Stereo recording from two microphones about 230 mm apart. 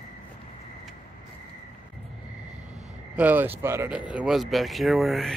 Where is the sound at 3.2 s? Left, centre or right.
Centre.